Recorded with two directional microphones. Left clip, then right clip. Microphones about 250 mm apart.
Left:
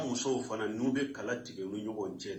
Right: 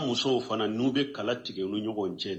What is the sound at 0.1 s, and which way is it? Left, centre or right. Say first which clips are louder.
A man's voice: right 6 dB; right.